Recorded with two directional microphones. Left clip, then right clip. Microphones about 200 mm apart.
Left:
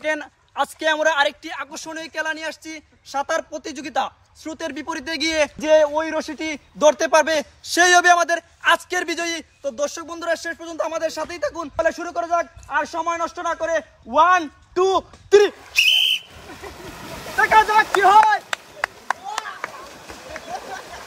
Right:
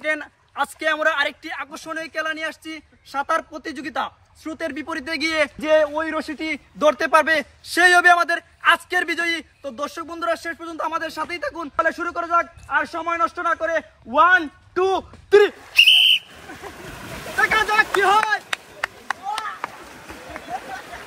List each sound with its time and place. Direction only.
0.0 s a man's voice: 45° left (ahead or behind)
17.4 s speech: 35° left (ahead or behind)